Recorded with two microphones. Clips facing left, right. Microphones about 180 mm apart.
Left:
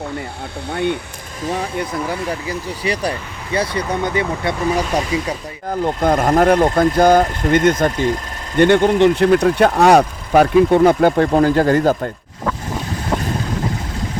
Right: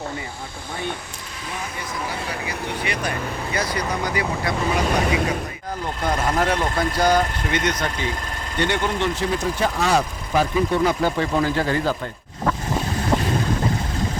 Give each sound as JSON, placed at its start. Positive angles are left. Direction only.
{"t": 0.7, "sound": "speech", "side_deg": 65}
{"t": 2.5, "sound": "speech", "side_deg": 35}
{"t": 5.8, "sound": "speech", "side_deg": 55}